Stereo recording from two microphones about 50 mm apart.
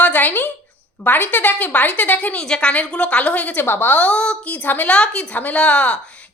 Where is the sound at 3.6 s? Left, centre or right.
Left.